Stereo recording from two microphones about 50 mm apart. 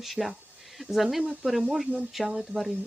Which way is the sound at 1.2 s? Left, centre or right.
Right.